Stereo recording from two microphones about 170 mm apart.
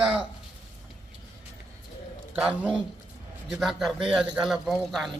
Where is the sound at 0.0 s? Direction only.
5° right (ahead or behind).